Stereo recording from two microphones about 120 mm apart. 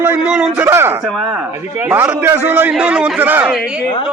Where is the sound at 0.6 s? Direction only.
20° right (ahead or behind).